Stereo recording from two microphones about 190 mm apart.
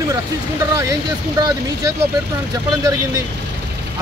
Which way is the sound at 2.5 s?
20° right (ahead or behind).